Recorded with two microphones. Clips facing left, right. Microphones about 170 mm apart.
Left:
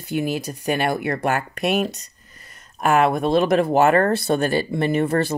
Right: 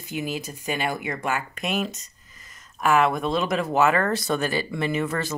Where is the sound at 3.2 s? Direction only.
60° left (ahead or behind).